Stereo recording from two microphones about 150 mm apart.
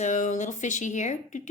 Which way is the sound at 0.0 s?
55° left (ahead or behind).